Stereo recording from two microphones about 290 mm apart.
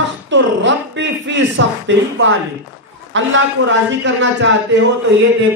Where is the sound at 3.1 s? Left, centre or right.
Right.